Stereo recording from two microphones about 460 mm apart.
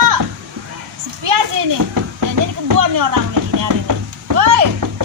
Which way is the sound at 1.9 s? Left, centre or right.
Right.